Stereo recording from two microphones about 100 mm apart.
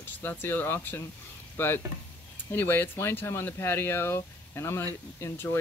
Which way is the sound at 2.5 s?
20° left (ahead or behind).